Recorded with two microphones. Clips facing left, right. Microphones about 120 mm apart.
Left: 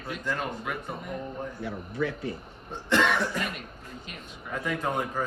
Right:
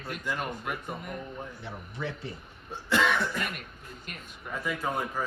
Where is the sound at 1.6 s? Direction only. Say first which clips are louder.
Left 7 dB; 25° right (ahead or behind).